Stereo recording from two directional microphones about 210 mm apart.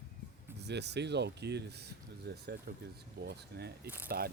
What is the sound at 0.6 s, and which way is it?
Speech, 55° right (ahead or behind).